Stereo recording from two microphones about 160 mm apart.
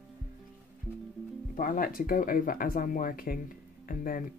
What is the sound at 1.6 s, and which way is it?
Speech, 65° left (ahead or behind).